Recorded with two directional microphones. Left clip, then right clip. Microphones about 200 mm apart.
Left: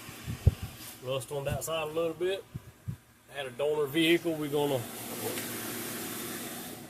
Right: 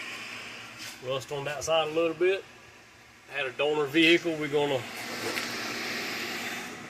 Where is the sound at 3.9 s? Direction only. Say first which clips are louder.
Right 4 dB; 5° left (ahead or behind).